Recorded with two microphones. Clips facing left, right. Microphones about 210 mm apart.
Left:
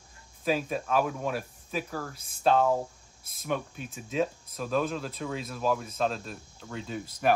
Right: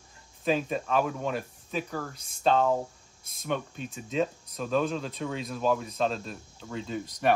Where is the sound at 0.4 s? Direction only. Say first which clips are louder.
Right 1 dB; 5° left (ahead or behind).